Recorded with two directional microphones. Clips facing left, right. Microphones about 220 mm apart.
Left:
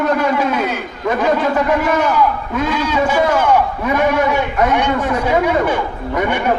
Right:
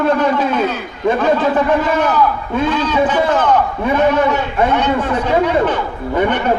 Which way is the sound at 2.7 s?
10° left (ahead or behind).